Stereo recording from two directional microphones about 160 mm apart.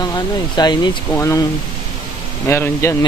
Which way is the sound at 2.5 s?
15° left (ahead or behind).